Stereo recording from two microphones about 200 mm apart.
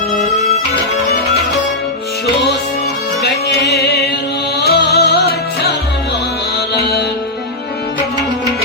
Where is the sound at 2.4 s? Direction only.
55° left (ahead or behind).